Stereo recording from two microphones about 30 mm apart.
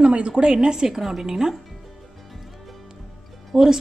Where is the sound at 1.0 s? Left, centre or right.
Centre.